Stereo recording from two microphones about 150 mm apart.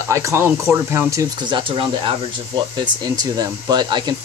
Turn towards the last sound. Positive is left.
turn(degrees=-30)  # may be behind; listen again after turning